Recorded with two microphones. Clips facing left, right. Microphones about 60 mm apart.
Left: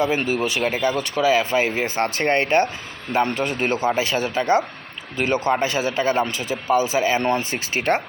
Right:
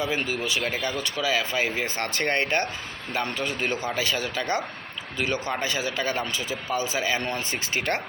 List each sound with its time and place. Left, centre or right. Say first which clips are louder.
0.0 s speech: left 6 dB; left